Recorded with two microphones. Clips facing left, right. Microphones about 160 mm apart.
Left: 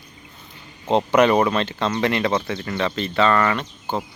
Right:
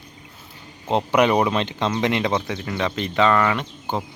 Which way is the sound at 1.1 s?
10° right (ahead or behind).